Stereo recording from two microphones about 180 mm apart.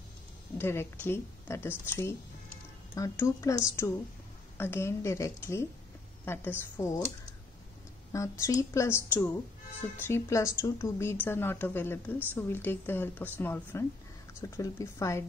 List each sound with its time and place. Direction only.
0.6 s a woman's voice: 15° left (ahead or behind)
8.1 s a woman's voice: 15° left (ahead or behind)